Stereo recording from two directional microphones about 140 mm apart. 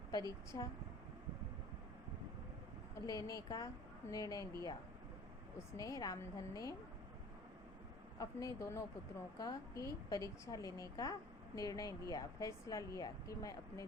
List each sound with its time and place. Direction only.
0.1 s a woman's voice: 25° left (ahead or behind)
3.1 s a woman's voice: 25° left (ahead or behind)
5.7 s a woman's voice: 25° left (ahead or behind)
8.2 s a woman's voice: 25° left (ahead or behind)